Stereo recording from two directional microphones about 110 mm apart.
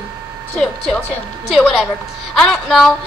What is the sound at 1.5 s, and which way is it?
A woman's voice, centre (ahead or behind).